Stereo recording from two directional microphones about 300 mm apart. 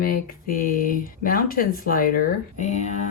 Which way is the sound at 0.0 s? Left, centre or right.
Left.